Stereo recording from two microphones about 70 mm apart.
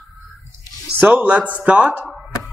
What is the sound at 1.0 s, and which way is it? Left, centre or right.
Speech, right.